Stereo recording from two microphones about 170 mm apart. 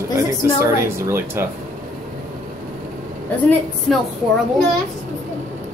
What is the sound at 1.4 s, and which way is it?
Speech, 15° right (ahead or behind).